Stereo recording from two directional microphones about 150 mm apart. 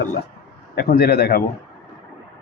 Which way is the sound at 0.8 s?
90° left.